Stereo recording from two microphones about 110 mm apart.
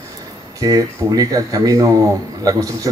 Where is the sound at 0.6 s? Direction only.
35° right (ahead or behind).